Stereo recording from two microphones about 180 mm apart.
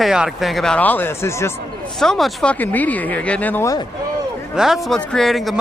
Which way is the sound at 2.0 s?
Centre (ahead or behind).